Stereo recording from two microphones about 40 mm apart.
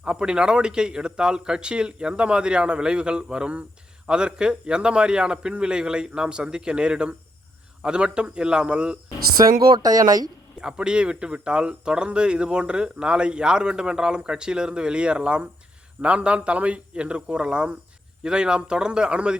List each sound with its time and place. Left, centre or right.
0.0 s speech: right
10.6 s speech: right